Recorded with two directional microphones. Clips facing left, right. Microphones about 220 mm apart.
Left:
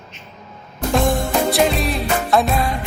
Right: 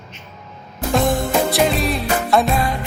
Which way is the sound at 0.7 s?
Centre (ahead or behind).